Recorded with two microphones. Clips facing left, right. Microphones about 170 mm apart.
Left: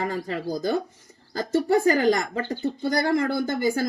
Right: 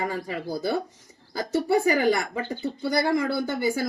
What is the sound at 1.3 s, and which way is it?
Speech, 10° right (ahead or behind).